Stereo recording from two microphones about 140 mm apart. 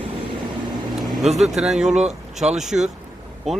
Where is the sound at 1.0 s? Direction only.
Centre (ahead or behind).